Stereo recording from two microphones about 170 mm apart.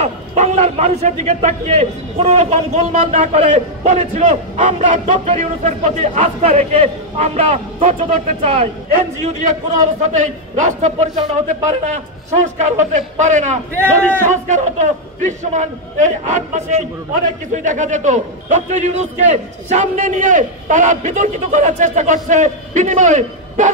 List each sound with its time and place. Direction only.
0.0 s a man's voice: 40° right (ahead or behind)